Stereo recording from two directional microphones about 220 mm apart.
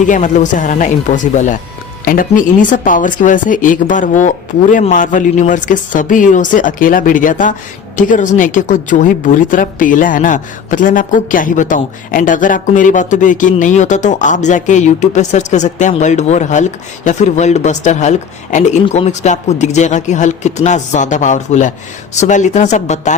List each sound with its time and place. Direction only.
0.0 s a woman's voice: 35° left (ahead or behind)